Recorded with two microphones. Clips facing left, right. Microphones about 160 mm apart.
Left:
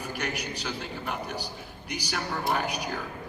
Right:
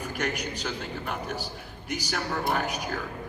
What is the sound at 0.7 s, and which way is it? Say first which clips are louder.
A man's voice: right 1 dB; 50° right (ahead or behind).